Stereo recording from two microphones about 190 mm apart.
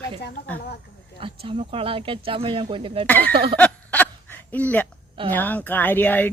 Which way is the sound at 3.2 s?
55° right (ahead or behind).